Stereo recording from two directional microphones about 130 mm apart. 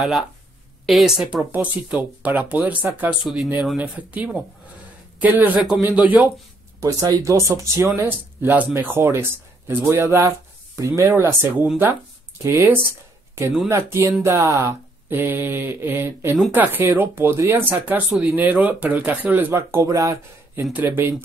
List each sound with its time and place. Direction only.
0.8 s speech: centre (ahead or behind)
6.8 s speech: 25° right (ahead or behind)
11.6 s speech: 10° right (ahead or behind)
19.5 s speech: 25° right (ahead or behind)